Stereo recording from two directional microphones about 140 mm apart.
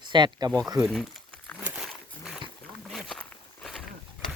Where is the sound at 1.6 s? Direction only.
10° right (ahead or behind).